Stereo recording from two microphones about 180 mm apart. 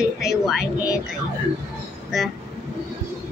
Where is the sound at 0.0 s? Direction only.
5° right (ahead or behind).